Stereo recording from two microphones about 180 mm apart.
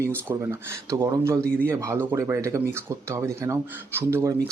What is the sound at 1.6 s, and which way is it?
Speech, 15° right (ahead or behind).